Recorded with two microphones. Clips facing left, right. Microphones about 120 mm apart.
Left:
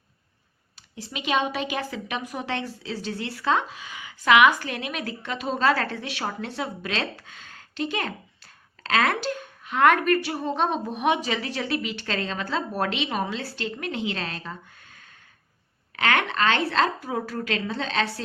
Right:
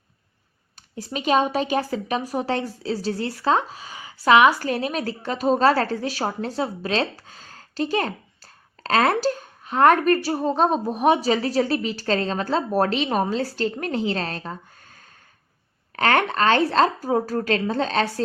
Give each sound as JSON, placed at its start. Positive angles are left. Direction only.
{"t": 0.9, "sound": "a woman's voice", "side_deg": -40}